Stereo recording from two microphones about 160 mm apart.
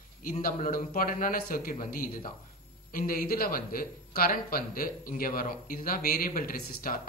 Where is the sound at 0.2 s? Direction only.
60° left (ahead or behind).